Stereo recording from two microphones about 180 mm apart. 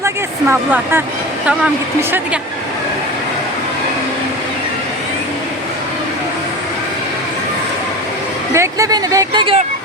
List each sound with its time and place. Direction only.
0.0 s speech: 10° right (ahead or behind)
8.5 s speech: 15° right (ahead or behind)